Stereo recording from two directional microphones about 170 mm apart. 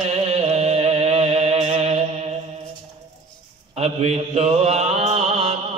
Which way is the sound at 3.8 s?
40° right (ahead or behind).